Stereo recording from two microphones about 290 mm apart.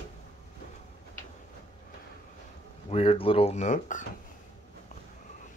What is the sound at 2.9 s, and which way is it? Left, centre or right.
Speech, centre.